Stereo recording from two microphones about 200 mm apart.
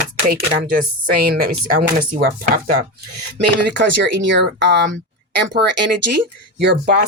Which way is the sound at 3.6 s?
60° right (ahead or behind).